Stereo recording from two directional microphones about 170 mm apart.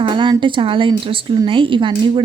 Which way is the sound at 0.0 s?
30° right (ahead or behind).